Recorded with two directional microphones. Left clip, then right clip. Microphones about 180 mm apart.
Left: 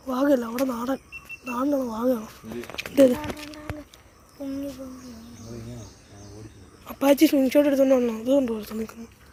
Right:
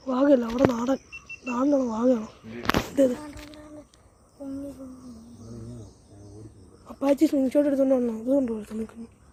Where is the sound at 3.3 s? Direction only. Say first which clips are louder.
Left 5 dB; 10° left (ahead or behind).